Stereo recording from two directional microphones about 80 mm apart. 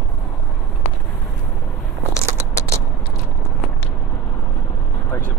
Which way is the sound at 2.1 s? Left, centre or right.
Left.